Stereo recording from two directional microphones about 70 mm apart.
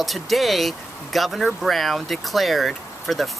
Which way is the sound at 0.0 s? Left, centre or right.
Centre.